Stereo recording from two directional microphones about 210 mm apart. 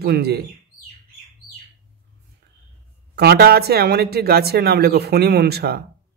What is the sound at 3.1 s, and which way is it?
Speech, 50° right (ahead or behind).